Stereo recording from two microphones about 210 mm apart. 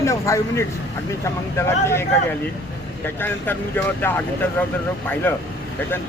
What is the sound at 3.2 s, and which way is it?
Speech, 10° left (ahead or behind).